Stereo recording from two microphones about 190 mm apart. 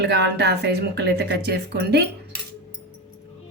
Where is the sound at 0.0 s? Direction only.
65° right (ahead or behind).